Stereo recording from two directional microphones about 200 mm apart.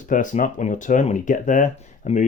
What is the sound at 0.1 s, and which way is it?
Speech, 40° left (ahead or behind).